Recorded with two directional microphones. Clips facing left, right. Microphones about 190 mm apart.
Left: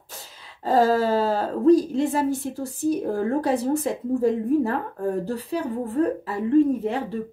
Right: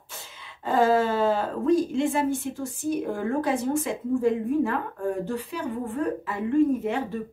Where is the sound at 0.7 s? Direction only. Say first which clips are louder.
Left 2 dB; 40° left (ahead or behind).